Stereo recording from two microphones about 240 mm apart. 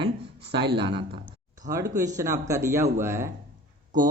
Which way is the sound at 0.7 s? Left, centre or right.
Right.